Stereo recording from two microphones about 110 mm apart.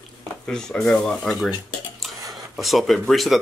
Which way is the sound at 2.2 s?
35° right (ahead or behind).